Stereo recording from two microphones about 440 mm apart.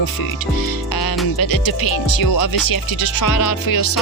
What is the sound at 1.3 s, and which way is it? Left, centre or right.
Music, left.